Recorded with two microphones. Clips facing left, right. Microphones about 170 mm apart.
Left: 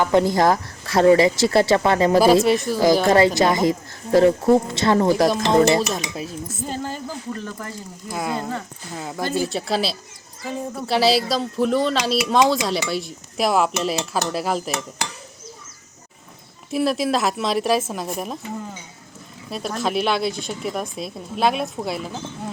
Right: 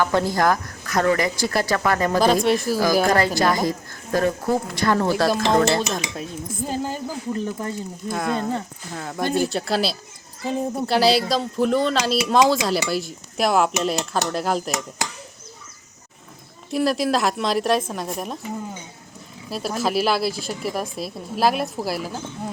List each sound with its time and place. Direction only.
0.0 s a woman's voice: 20° left (ahead or behind)
2.1 s speech: 5° left (ahead or behind)
3.1 s a woman's voice: 20° left (ahead or behind)
5.3 s speech: centre (ahead or behind)
6.6 s a woman's voice: 15° right (ahead or behind)
8.1 s speech: 5° left (ahead or behind)
8.4 s speech: 20° right (ahead or behind)
9.0 s speech: 5° left (ahead or behind)
16.7 s speech: centre (ahead or behind)
19.5 s speech: 5° right (ahead or behind)